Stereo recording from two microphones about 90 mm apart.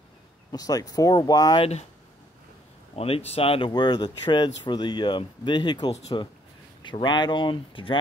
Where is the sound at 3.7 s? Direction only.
50° left (ahead or behind).